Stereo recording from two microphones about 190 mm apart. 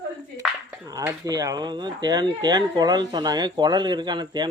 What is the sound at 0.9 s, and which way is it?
Speech, 20° right (ahead or behind).